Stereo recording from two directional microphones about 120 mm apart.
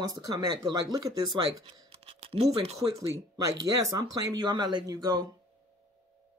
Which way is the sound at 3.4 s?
30° right (ahead or behind).